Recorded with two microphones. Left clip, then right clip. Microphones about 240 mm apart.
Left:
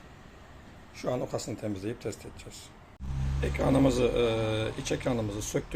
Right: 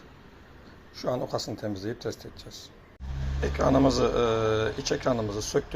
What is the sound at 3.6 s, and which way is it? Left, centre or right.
Speech, centre.